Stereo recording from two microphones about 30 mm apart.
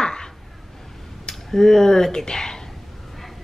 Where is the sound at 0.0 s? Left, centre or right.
Left.